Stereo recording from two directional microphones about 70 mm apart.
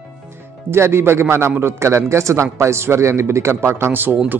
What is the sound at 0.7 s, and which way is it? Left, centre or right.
A man's voice, right.